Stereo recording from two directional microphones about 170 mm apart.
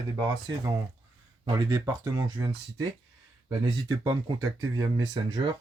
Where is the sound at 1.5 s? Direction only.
25° right (ahead or behind).